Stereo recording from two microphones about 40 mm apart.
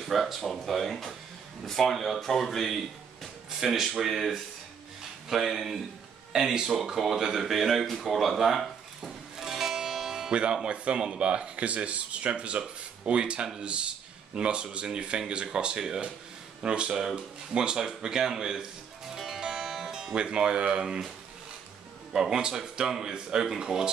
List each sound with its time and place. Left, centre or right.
0.0 s speech: centre
3.4 s speech: centre
5.3 s speech: centre
6.3 s speech: centre
6.9 s a sound: centre
10.3 s speech: right
19.1 s music: centre
22.1 s speech: centre